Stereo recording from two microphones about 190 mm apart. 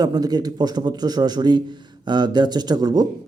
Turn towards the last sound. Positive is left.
turn(degrees=-20)  # may be behind; listen again after turning